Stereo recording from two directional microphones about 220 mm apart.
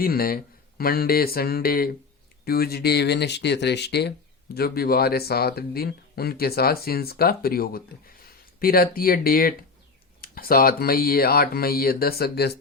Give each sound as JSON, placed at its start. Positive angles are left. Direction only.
{"t": 0.0, "sound": "speech", "side_deg": 40}